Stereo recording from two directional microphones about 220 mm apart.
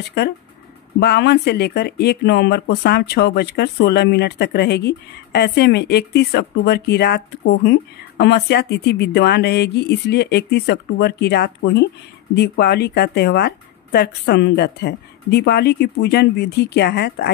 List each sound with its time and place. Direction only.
0.9 s speech: 50° left (ahead or behind)